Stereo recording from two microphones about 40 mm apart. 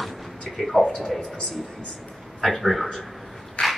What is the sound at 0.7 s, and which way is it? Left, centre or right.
Speech, centre.